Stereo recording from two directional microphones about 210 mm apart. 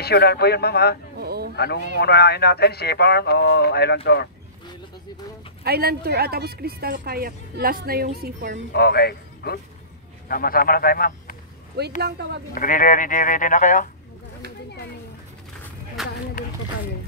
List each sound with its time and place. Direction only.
0.0 s speech: 50° left (ahead or behind)
1.1 s a sound: 50° right (ahead or behind)
1.6 s speech: 50° left (ahead or behind)
5.6 s speech: 50° right (ahead or behind)
8.7 s a man's voice: 50° left (ahead or behind)
11.8 s speech: 50° right (ahead or behind)
12.5 s speech: 40° left (ahead or behind)
16.0 s a sound: centre (ahead or behind)
16.4 s a sound: 40° left (ahead or behind)